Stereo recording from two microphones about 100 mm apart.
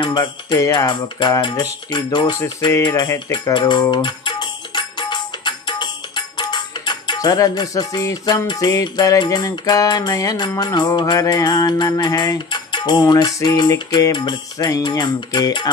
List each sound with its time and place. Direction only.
0.0 s music: 50° left (ahead or behind)